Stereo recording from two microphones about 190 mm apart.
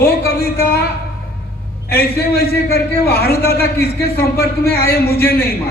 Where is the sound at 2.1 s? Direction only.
55° left (ahead or behind).